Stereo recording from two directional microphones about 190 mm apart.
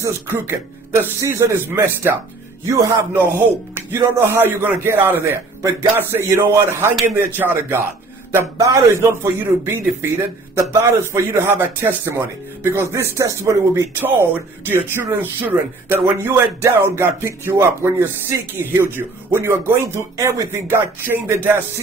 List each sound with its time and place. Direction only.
0.0 s a man's voice: 15° right (ahead or behind)